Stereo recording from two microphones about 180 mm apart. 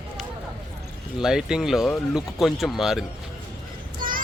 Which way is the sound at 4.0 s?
50° right (ahead or behind).